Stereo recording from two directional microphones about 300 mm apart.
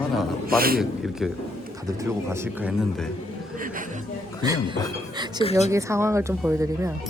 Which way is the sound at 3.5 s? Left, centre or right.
Right.